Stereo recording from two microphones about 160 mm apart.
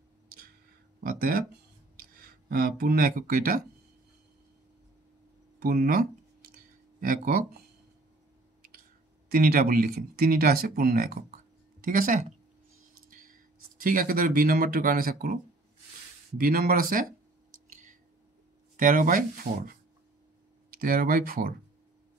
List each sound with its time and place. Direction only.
1.0 s speech: 65° right (ahead or behind)
2.5 s speech: 70° right (ahead or behind)
5.6 s speech: 70° right (ahead or behind)
9.3 s speech: 65° right (ahead or behind)
16.3 s speech: 65° right (ahead or behind)
18.8 s speech: 60° right (ahead or behind)